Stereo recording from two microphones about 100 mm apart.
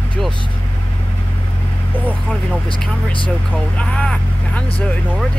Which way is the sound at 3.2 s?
10° left (ahead or behind).